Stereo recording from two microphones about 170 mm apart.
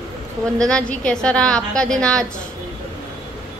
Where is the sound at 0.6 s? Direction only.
5° left (ahead or behind).